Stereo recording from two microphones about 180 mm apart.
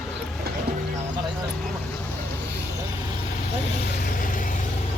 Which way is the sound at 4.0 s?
50° left (ahead or behind).